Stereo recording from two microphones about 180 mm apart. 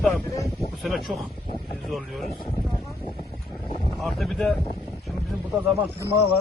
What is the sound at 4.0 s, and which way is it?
Speech, centre (ahead or behind).